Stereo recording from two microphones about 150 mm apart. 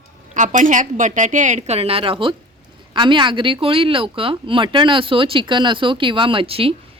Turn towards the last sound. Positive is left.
turn(degrees=-40)  # may be behind; listen again after turning